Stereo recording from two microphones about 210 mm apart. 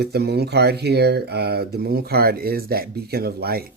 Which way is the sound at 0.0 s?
50° right (ahead or behind).